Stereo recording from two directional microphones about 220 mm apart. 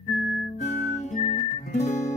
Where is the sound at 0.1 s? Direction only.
45° left (ahead or behind).